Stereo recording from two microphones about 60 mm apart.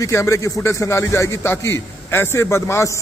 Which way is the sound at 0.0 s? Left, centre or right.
Left.